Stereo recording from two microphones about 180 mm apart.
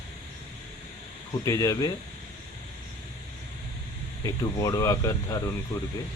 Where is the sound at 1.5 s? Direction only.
20° left (ahead or behind).